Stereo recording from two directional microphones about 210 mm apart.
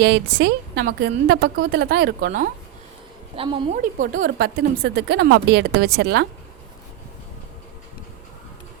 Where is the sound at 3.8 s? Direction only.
40° right (ahead or behind).